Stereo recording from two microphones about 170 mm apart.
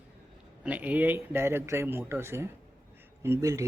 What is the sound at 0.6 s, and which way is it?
Speech, 10° right (ahead or behind).